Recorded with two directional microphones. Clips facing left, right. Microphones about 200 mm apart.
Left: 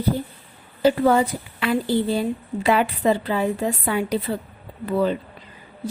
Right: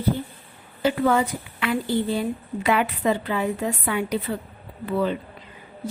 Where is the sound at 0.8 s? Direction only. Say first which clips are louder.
Left 3 dB; 35° left (ahead or behind).